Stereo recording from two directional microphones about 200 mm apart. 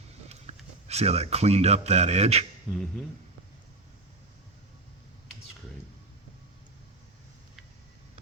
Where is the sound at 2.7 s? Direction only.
Centre (ahead or behind).